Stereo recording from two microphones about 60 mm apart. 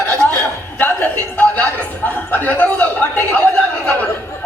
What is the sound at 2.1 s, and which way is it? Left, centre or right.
Speech, left.